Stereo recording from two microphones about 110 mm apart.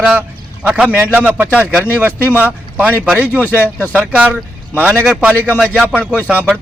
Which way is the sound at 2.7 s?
15° right (ahead or behind).